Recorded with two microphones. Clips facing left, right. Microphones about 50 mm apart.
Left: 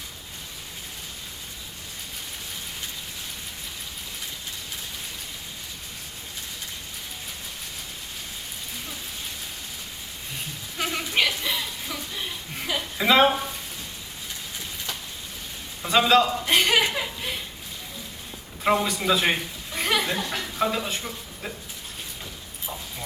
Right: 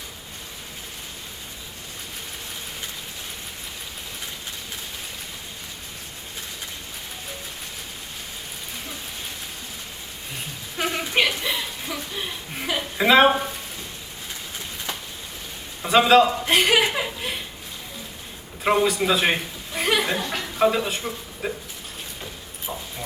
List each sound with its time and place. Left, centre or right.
10.8 s a sound: centre
15.8 s chuckle: centre
18.6 s chuckle: centre